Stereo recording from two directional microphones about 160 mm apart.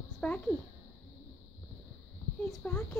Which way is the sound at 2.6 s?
15° left (ahead or behind).